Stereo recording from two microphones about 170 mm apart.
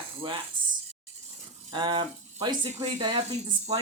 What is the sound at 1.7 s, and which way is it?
Speech, 30° right (ahead or behind).